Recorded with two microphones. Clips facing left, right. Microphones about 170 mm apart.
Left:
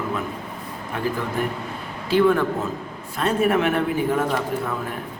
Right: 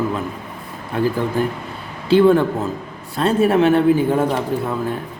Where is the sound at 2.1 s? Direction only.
30° right (ahead or behind).